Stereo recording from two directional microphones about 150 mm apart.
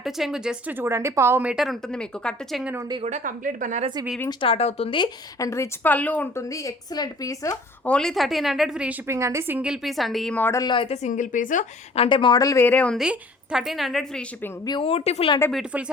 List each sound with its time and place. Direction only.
0.0 s a woman's voice: centre (ahead or behind)
3.0 s a woman's voice: 50° right (ahead or behind)
4.3 s speech: 35° left (ahead or behind); by 6.4 s 10° left (ahead or behind)
6.5 s speech: 20° left (ahead or behind)
7.9 s a woman's voice: 5° left (ahead or behind)
9.0 s a woman's voice: 20° right (ahead or behind); by 10.6 s 10° left (ahead or behind)
10.6 s a woman's voice: 35° left (ahead or behind); by 11.6 s 60° left (ahead or behind)
11.9 s speech: 35° left (ahead or behind); by 13.0 s 10° left (ahead or behind)
13.0 s a woman's voice: 5° right (ahead or behind)
14.6 s speech: 25° left (ahead or behind)
14.8 s speech: 40° left (ahead or behind)
15.5 s speech: 5° right (ahead or behind)